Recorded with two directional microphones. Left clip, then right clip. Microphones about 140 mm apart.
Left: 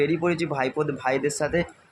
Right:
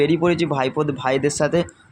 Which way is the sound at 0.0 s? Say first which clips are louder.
Right 5 dB; 20° right (ahead or behind).